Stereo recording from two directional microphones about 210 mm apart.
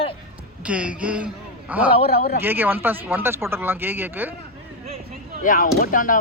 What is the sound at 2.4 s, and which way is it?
Speech, 10° right (ahead or behind).